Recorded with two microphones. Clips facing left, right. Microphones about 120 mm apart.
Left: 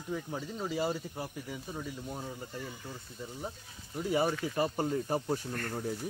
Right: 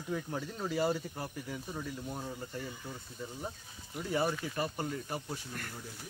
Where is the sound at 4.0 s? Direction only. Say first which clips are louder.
Left 3 dB; 15° left (ahead or behind).